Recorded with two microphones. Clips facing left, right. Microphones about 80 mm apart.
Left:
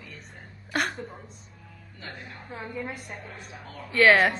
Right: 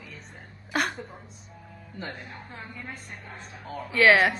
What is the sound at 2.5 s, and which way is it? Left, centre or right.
A woman's voice, centre.